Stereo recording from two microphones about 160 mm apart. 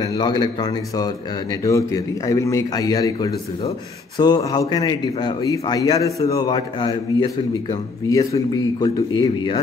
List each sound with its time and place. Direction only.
0.0 s a man's voice: 25° left (ahead or behind)